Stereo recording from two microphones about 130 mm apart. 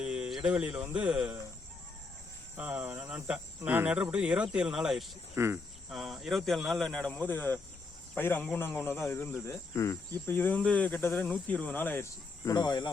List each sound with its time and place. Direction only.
0.0 s speech: 5° right (ahead or behind)
2.6 s speech: 15° right (ahead or behind)
5.3 s speech: 20° right (ahead or behind)
5.9 s speech: centre (ahead or behind); by 12.9 s 35° left (ahead or behind)